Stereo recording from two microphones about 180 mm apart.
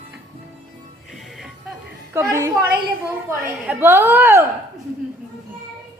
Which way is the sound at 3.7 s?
10° right (ahead or behind).